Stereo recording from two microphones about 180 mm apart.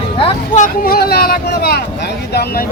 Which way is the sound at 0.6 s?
55° left (ahead or behind).